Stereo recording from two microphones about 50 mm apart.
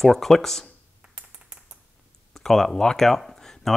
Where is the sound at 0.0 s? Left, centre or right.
Centre.